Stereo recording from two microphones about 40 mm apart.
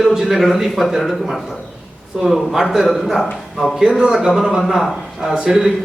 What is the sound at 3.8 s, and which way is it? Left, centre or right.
Speech, centre.